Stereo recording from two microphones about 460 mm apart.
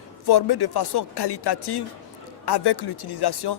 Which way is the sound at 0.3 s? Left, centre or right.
Left.